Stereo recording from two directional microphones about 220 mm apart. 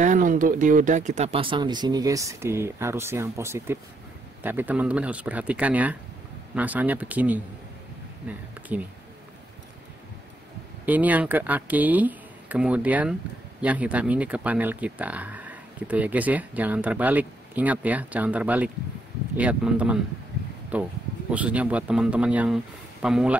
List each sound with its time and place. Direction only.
0.0 s speech: 35° right (ahead or behind); by 8.8 s 5° right (ahead or behind)
10.9 s speech: 5° right (ahead or behind)